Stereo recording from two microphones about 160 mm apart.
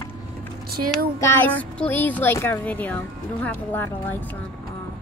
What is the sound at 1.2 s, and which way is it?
Speech, 15° left (ahead or behind).